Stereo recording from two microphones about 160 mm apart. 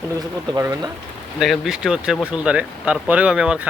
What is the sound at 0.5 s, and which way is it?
Speech, 20° right (ahead or behind).